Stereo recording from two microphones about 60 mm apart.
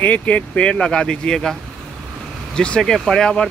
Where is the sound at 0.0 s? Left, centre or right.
Left.